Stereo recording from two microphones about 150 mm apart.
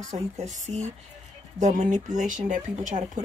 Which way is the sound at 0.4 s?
50° right (ahead or behind).